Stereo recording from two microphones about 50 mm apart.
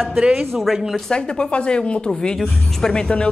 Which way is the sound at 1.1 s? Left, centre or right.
Centre.